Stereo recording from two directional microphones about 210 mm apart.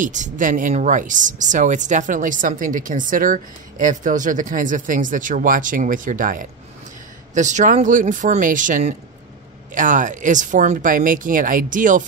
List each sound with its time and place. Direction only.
0.0 s speech: 35° right (ahead or behind)